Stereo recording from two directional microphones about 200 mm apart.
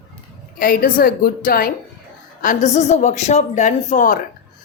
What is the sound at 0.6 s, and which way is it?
Speech, 45° left (ahead or behind).